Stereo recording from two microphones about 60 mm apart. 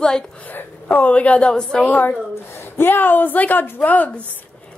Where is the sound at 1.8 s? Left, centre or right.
Left.